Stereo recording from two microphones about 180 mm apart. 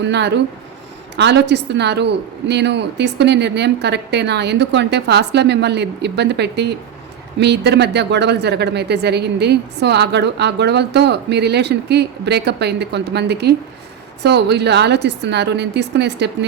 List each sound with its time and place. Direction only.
0.0 s speech: 75° right (ahead or behind)